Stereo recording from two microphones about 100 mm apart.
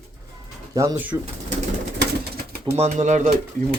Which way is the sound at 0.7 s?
40° right (ahead or behind).